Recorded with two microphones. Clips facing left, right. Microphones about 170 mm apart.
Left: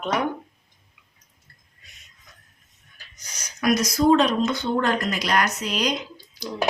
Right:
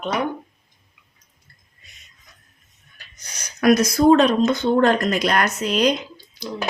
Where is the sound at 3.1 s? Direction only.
55° right (ahead or behind).